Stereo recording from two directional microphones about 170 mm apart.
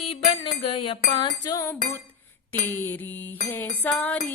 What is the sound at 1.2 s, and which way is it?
Music, 25° left (ahead or behind).